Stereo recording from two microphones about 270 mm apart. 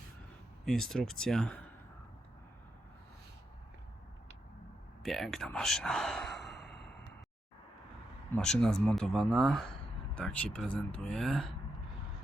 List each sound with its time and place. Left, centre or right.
0.6 s speech: centre
5.0 s speech: centre
6.6 s sigh: left
8.4 s speech: centre